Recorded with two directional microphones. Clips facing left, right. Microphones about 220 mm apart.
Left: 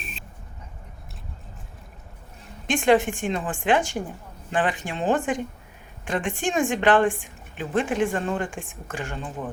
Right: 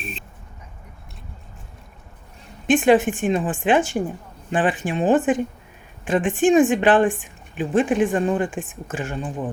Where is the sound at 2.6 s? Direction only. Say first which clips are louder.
Right 4 dB; 20° right (ahead or behind).